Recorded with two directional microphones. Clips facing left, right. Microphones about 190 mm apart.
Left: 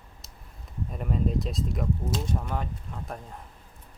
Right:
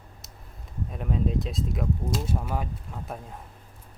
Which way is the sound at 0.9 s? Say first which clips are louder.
Even; centre (ahead or behind).